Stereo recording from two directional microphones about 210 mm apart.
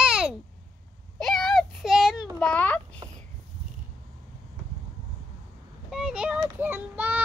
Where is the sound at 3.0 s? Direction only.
20° right (ahead or behind).